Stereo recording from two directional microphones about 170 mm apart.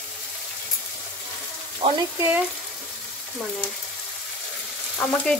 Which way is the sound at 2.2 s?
10° right (ahead or behind).